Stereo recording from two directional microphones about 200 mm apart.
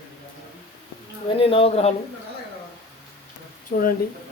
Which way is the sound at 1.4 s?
30° left (ahead or behind).